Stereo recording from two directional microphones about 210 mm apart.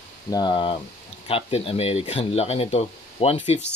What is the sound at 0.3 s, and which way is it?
Speech, 20° left (ahead or behind).